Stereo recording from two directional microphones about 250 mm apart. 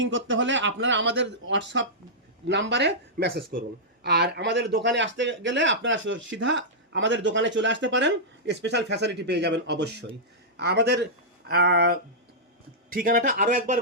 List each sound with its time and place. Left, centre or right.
0.0 s a man's voice: right